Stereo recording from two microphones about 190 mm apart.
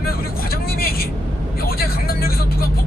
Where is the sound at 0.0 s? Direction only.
55° left (ahead or behind).